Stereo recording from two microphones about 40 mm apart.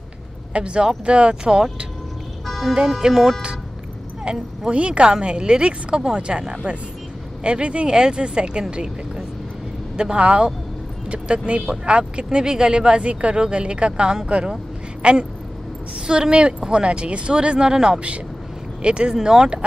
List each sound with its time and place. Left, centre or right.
0.5 s speech: right
2.4 s music: centre
3.0 s speech: centre
4.2 s speech: right